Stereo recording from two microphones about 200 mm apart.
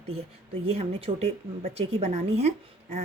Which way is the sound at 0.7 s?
30° right (ahead or behind).